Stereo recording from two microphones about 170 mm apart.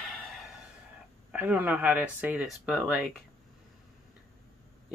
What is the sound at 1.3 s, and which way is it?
Speech, 10° right (ahead or behind).